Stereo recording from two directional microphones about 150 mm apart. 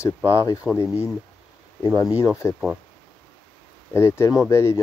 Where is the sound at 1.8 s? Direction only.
25° left (ahead or behind).